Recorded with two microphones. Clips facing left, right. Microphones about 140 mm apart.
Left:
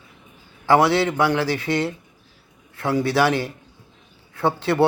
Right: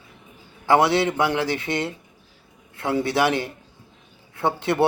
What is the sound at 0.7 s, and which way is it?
Speech, 20° right (ahead or behind).